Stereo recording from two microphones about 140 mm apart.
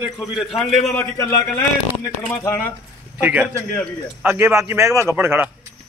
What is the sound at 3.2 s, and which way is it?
A man's voice, 10° right (ahead or behind).